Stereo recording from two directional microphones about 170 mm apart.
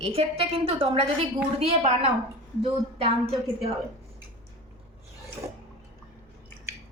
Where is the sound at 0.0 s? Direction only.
35° right (ahead or behind).